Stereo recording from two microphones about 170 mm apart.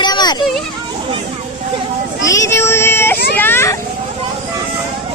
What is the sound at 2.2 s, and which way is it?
Speech, 20° left (ahead or behind).